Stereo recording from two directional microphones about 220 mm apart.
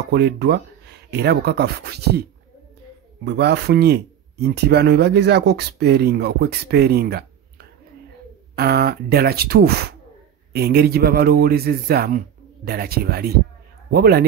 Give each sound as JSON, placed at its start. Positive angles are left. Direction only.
{"t": 0.1, "sound": "speech", "side_deg": -50}
{"t": 3.3, "sound": "speech", "side_deg": -50}